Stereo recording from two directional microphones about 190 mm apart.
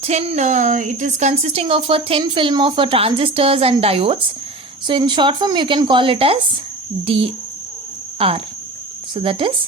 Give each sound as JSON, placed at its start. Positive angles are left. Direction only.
{"t": 0.0, "sound": "a woman's voice", "side_deg": -35}